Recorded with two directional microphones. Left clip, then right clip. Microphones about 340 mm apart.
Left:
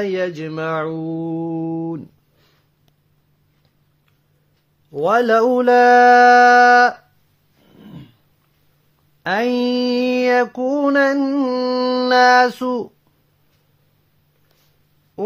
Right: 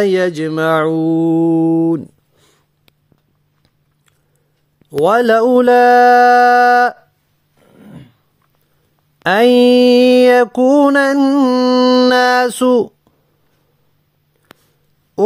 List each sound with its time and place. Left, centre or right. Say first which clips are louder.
0.0 s music: right 8 dB; right
4.9 s music: right 4 dB; right
9.2 s music: right 9 dB; right